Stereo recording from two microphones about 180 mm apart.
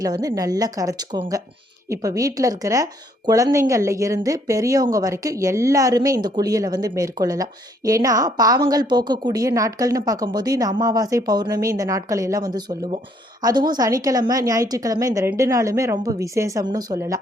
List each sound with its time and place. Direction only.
0.0 s a woman's voice: 20° right (ahead or behind)